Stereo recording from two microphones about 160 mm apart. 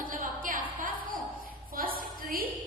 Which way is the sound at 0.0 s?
55° right (ahead or behind).